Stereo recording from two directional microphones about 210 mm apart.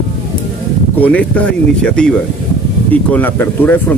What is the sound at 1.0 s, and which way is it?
Speech, 5° left (ahead or behind).